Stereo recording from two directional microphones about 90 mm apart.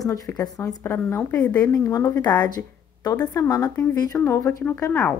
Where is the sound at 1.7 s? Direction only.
40° left (ahead or behind).